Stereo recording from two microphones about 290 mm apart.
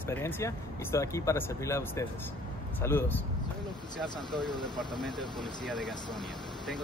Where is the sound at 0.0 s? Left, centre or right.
Centre.